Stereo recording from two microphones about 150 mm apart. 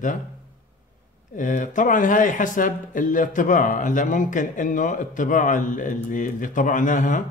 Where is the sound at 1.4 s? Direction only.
60° left (ahead or behind).